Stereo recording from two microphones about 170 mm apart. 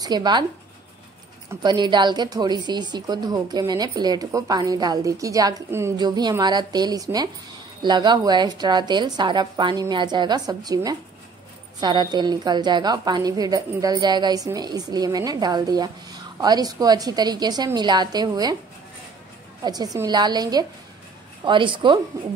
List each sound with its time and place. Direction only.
0.0 s a woman's voice: 25° right (ahead or behind)
1.5 s a woman's voice: 25° right (ahead or behind)
19.6 s a woman's voice: 25° right (ahead or behind)